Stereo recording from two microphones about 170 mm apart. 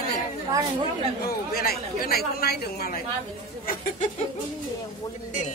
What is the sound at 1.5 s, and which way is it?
Speech, 65° left (ahead or behind).